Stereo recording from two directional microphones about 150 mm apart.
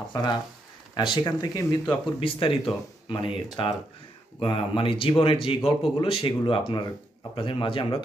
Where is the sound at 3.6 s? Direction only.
35° left (ahead or behind).